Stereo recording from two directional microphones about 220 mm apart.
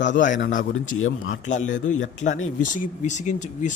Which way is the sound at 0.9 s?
65° left (ahead or behind).